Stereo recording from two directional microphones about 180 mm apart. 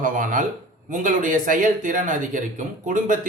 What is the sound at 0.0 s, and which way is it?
Speech, 50° right (ahead or behind).